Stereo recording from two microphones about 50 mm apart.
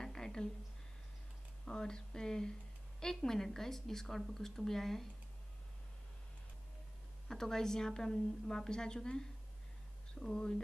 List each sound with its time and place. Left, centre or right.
0.0 s a sound: centre
1.7 s a woman's voice: centre
7.2 s a woman's voice: centre
10.3 s a woman's voice: centre